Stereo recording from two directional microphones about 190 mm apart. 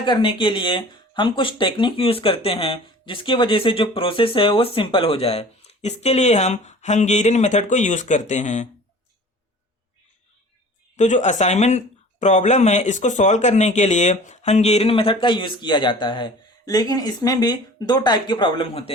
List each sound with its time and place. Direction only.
0.0 s speech: 25° left (ahead or behind); by 8.6 s 40° left (ahead or behind)
10.9 s speech: 40° left (ahead or behind)